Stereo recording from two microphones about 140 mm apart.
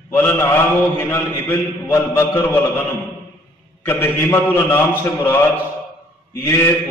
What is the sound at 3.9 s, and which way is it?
A man's voice, 15° left (ahead or behind).